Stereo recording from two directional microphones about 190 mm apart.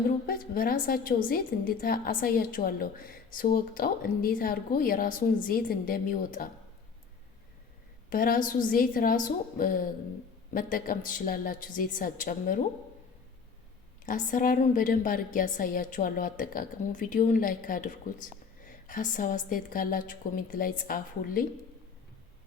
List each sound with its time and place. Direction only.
0.3 s a woman's voice: 50° left (ahead or behind)
8.1 s a woman's voice: 45° left (ahead or behind)
14.0 s a woman's voice: 45° left (ahead or behind)